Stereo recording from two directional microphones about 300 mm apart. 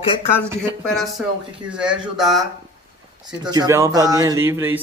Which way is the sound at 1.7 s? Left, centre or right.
Centre.